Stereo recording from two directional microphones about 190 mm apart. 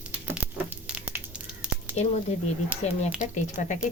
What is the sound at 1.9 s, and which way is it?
Speech, 35° left (ahead or behind).